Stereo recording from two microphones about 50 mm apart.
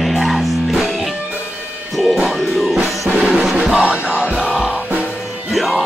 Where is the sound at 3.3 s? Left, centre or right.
Centre.